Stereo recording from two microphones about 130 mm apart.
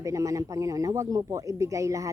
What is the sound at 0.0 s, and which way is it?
A man's voice, 25° right (ahead or behind).